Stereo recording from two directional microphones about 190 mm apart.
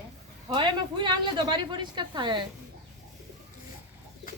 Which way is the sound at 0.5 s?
25° right (ahead or behind).